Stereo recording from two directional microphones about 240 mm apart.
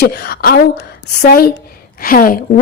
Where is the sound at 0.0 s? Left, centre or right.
Left.